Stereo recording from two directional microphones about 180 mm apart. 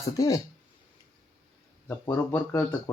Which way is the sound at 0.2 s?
20° left (ahead or behind).